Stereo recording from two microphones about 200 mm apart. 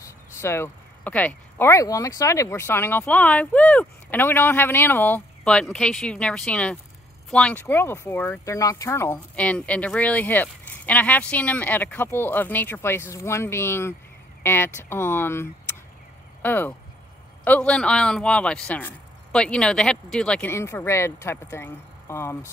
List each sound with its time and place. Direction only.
0.4 s speech: 10° left (ahead or behind)
16.4 s speech: 10° left (ahead or behind)